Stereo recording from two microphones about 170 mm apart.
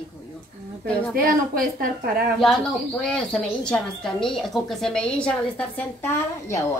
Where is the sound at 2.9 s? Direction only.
5° left (ahead or behind).